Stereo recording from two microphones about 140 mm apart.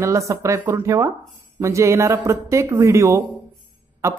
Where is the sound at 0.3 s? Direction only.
20° right (ahead or behind).